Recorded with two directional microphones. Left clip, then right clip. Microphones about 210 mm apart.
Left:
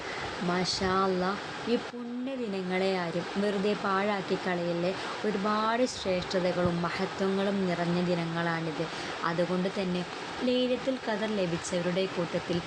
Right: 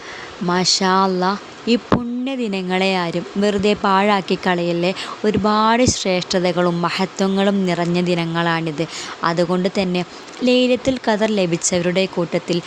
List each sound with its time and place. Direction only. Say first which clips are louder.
0.5 s a woman's voice: right 13 dB; 55° right (ahead or behind)